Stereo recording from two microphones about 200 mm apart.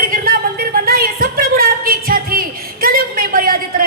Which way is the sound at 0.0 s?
45° right (ahead or behind).